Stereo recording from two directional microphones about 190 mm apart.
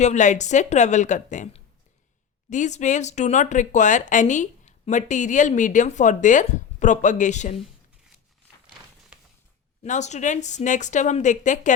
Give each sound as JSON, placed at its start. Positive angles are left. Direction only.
{"t": 0.0, "sound": "speech", "side_deg": 40}
{"t": 9.8, "sound": "speech", "side_deg": 40}